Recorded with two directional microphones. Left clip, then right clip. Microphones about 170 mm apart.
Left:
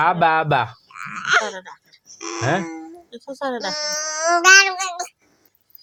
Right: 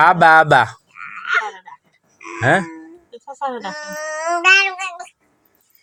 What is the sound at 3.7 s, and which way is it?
Speech, 25° left (ahead or behind).